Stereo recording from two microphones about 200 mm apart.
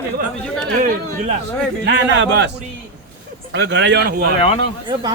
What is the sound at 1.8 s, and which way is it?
Speech, 60° right (ahead or behind).